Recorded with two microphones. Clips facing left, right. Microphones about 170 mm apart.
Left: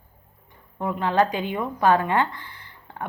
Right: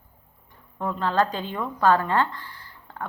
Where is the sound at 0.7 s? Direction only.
15° left (ahead or behind).